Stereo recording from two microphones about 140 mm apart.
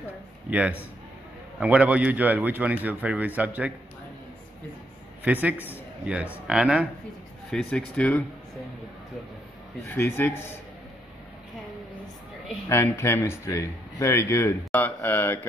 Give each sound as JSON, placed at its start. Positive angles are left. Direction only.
{"t": 0.5, "sound": "a man's voice", "side_deg": -10}
{"t": 5.2, "sound": "a man's voice", "side_deg": -10}
{"t": 7.5, "sound": "speech", "side_deg": 5}
{"t": 9.8, "sound": "a man's voice", "side_deg": 15}
{"t": 12.6, "sound": "speech", "side_deg": 20}
{"t": 14.6, "sound": "mantra", "side_deg": 10}